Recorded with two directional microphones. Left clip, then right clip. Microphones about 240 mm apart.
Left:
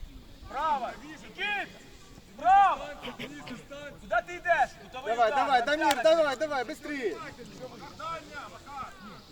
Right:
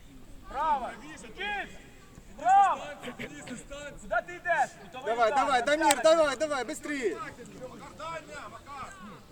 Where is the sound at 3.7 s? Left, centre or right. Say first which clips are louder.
Right 2 dB; right.